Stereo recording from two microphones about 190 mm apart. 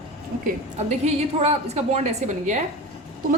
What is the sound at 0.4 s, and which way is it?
A woman's voice, 35° right (ahead or behind).